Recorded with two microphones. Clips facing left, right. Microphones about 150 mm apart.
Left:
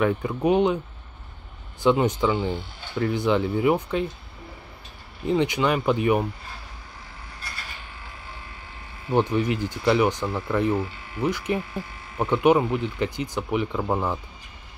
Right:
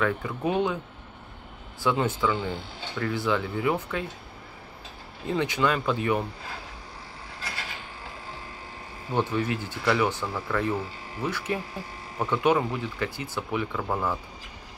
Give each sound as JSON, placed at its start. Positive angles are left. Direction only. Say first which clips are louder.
{"t": 0.0, "sound": "speech", "louder": "left 4 dB", "side_deg": 20}
{"t": 1.8, "sound": "speech", "louder": "left 5 dB", "side_deg": 20}
{"t": 5.2, "sound": "speech", "louder": "left 3 dB", "side_deg": 20}
{"t": 7.3, "sound": "train", "louder": "right 3 dB", "side_deg": -90}
{"t": 9.1, "sound": "speech", "louder": "left 4 dB", "side_deg": 15}